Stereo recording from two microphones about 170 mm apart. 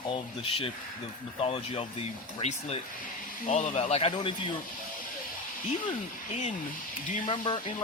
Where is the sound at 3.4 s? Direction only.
50° left (ahead or behind); by 4.5 s 30° left (ahead or behind).